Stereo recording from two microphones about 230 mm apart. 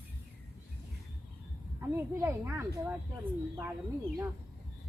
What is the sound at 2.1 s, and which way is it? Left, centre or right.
Speech, centre.